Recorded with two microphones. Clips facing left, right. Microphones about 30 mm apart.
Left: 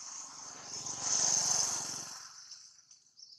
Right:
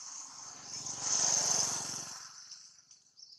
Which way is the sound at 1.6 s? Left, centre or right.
Right.